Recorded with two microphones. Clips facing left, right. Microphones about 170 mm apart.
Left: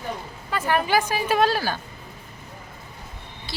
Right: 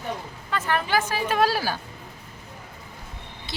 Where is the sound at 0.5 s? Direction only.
10° left (ahead or behind).